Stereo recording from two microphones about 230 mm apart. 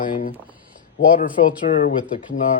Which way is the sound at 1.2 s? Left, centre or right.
Left.